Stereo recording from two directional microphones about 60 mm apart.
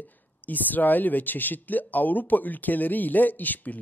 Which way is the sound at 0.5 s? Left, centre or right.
Left.